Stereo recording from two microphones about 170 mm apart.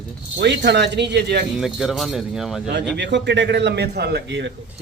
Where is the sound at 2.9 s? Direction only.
90° right.